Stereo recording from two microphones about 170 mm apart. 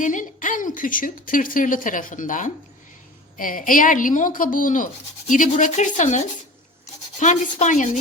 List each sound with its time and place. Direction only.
0.0 s a woman's voice: 50° left (ahead or behind)